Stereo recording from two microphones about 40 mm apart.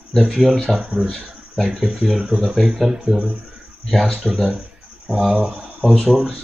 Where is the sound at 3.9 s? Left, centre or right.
Centre.